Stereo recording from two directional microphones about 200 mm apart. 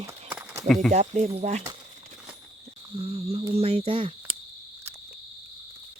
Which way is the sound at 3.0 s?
30° right (ahead or behind).